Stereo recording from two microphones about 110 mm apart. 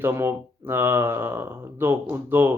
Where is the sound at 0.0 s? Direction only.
20° right (ahead or behind).